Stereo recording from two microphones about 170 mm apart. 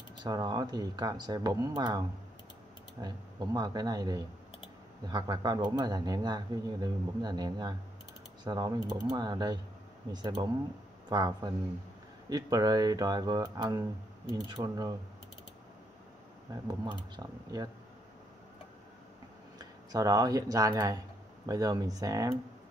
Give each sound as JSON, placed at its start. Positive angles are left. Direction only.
{"t": 0.2, "sound": "speech", "side_deg": -25}
{"t": 16.6, "sound": "speech", "side_deg": -20}
{"t": 19.6, "sound": "speech", "side_deg": -20}